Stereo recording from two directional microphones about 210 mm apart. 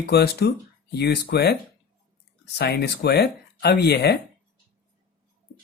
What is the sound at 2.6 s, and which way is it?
Speech, 50° left (ahead or behind).